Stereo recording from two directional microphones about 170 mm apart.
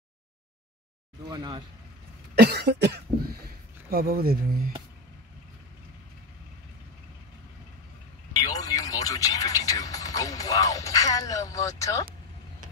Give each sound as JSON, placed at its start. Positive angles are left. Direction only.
{"t": 1.3, "sound": "speech", "side_deg": -25}
{"t": 2.3, "sound": "cough", "side_deg": -70}
{"t": 3.9, "sound": "speech", "side_deg": -60}
{"t": 8.5, "sound": "speech", "side_deg": 20}